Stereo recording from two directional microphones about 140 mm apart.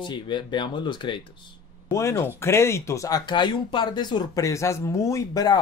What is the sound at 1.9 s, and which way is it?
Speech, 20° left (ahead or behind).